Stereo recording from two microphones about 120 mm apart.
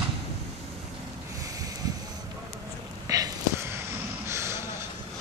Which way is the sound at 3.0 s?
30° right (ahead or behind).